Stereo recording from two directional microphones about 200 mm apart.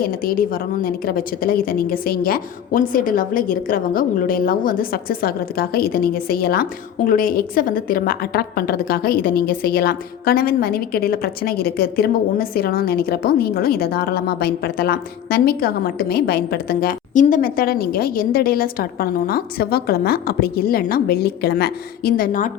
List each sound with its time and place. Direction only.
0.0 s a woman's voice: 45° left (ahead or behind)